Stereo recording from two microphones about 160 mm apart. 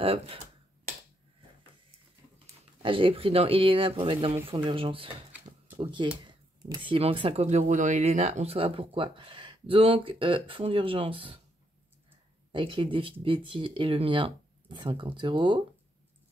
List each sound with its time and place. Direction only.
0.0 s speech: 35° right (ahead or behind)
2.3 s speech: 35° right (ahead or behind)
12.5 s speech: 30° right (ahead or behind)